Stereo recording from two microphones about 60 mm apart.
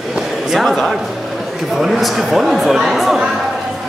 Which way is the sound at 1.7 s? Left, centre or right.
Centre.